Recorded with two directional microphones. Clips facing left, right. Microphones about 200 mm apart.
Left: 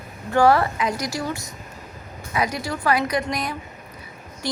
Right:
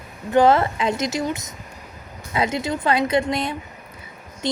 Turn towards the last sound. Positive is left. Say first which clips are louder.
# right 3 dB
turn(degrees=-20)  # may be behind; listen again after turning